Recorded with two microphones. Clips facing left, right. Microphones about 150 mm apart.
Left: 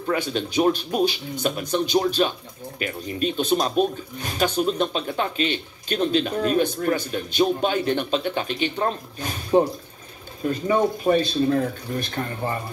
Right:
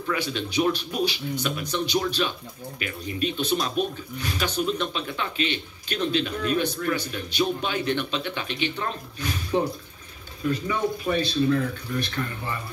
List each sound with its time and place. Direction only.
0.3 s speech: 35° left (ahead or behind)